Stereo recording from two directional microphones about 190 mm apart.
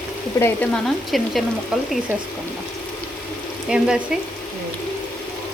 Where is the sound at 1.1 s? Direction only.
Centre (ahead or behind).